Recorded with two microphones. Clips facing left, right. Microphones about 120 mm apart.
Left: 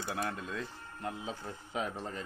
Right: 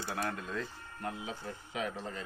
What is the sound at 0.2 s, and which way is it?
Speech, 15° left (ahead or behind).